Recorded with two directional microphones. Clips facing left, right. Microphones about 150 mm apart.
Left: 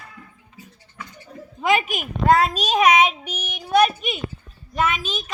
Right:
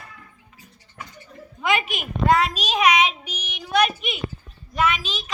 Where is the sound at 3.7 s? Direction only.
45° left (ahead or behind).